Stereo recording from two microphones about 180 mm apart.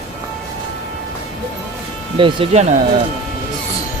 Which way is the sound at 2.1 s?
30° right (ahead or behind).